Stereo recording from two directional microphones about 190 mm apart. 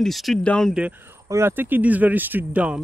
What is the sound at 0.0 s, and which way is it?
Speech, centre (ahead or behind).